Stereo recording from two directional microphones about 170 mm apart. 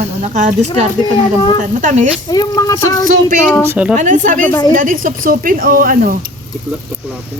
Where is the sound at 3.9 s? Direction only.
50° right (ahead or behind).